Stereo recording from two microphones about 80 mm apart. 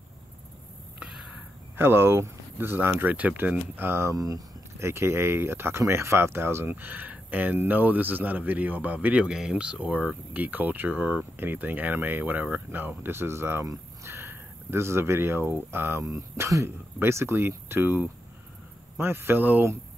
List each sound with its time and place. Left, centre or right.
1.8 s speech: right
4.1 s a sound: right
4.8 s speech: right
9.3 s speech: centre; by 19.7 s right